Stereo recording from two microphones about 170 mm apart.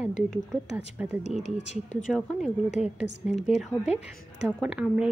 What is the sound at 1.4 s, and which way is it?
Speech, 40° left (ahead or behind).